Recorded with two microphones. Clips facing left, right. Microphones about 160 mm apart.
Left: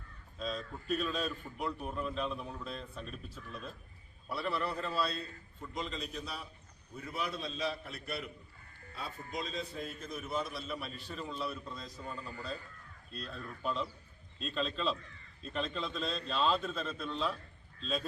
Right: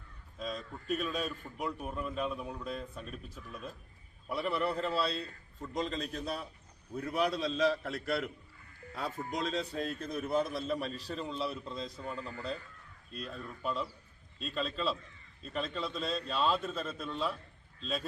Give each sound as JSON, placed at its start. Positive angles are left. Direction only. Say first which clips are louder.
{"t": 0.4, "sound": "a man's voice", "louder": "even", "side_deg": -10}
{"t": 5.7, "sound": "a man's voice", "louder": "right 4 dB", "side_deg": -45}
{"t": 6.9, "sound": "a man's voice", "louder": "right 7 dB", "side_deg": -70}
{"t": 9.4, "sound": "a man's voice", "louder": "right 5 dB", "side_deg": -80}
{"t": 13.1, "sound": "a man's voice", "louder": "right 2 dB", "side_deg": -10}